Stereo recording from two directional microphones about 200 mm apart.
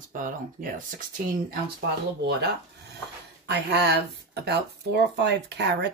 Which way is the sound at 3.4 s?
55° right (ahead or behind).